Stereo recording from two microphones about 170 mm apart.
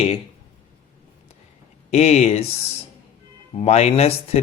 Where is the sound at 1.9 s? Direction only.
40° left (ahead or behind).